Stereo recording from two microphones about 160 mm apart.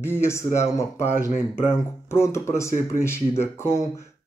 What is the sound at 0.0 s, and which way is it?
Speech, 15° left (ahead or behind).